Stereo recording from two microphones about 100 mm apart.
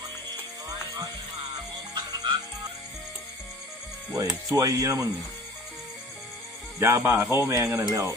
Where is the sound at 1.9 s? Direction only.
40° right (ahead or behind).